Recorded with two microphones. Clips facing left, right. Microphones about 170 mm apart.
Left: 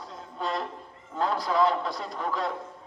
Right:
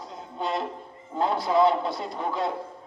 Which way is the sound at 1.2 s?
25° right (ahead or behind).